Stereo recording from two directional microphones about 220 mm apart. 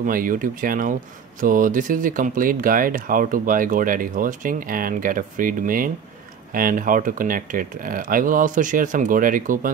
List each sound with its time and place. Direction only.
0.0 s speech: 40° right (ahead or behind)